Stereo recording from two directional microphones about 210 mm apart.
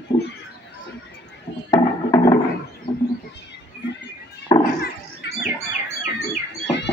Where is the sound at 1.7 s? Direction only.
15° left (ahead or behind).